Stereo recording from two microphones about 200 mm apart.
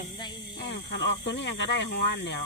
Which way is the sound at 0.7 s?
60° left (ahead or behind).